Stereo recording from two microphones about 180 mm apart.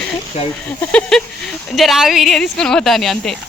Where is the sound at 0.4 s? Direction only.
35° left (ahead or behind).